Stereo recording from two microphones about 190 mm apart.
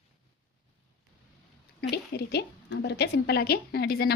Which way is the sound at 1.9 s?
60° left (ahead or behind).